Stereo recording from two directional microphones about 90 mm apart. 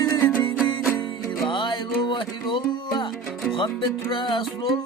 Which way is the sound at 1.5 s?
65° left (ahead or behind).